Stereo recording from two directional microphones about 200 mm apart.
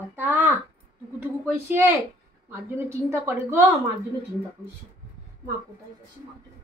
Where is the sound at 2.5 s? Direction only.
10° right (ahead or behind).